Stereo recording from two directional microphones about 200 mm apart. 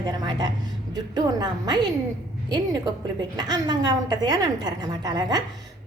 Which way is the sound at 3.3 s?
20° right (ahead or behind).